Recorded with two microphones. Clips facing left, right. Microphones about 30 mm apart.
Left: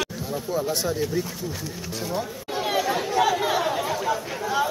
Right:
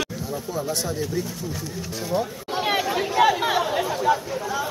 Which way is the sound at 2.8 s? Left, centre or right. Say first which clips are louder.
Right 2 dB; centre.